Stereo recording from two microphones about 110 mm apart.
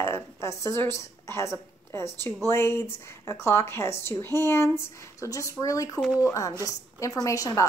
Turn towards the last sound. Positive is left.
turn(degrees=30)  # may be behind; listen again after turning